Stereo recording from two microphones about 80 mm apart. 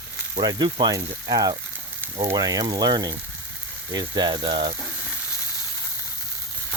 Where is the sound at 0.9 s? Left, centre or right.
Right.